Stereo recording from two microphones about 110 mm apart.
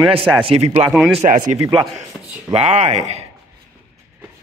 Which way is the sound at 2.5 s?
85° right.